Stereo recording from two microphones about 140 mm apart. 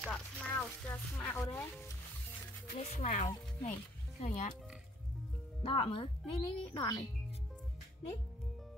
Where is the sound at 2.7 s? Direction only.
50° left (ahead or behind).